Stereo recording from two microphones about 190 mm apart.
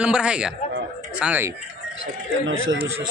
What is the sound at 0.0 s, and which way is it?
Speech, 5° right (ahead or behind).